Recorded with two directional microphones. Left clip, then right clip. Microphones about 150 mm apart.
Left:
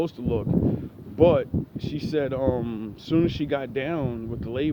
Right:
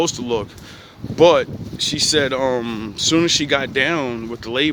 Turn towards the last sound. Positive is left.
turn(degrees=-40)  # may be behind; listen again after turning